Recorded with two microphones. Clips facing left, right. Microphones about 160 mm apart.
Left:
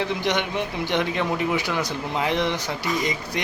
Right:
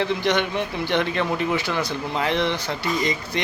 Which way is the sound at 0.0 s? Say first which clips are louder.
Right 2 dB; 15° left (ahead or behind).